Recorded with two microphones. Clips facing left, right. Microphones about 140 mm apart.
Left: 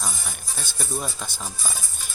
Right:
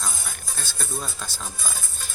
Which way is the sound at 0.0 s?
15° left (ahead or behind).